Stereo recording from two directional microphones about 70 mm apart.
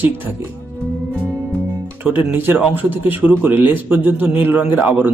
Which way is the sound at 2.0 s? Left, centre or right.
Right.